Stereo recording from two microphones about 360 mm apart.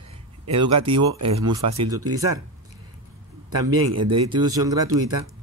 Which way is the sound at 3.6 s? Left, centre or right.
Right.